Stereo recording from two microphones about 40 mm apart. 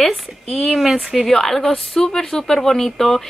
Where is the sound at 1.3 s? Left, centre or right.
Centre.